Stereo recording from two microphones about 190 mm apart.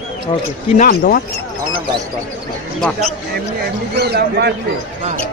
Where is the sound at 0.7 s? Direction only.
50° left (ahead or behind).